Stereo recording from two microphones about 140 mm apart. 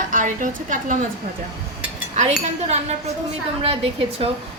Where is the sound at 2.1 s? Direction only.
55° right (ahead or behind).